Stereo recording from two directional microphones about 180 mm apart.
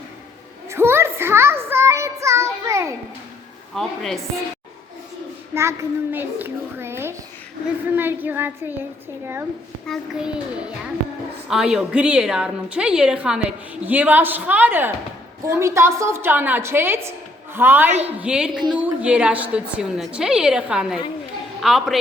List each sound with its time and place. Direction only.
0.7 s a sound: 15° right (ahead or behind)
3.8 s a woman's voice: centre (ahead or behind)
5.5 s a woman's voice: 15° right (ahead or behind)
9.8 s a woman's voice: centre (ahead or behind)
11.4 s a woman's voice: 5° right (ahead or behind)